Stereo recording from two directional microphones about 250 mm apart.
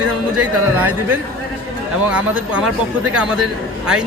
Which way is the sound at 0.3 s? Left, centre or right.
Centre.